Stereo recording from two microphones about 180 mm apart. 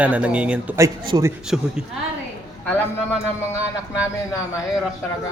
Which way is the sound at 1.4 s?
5° right (ahead or behind).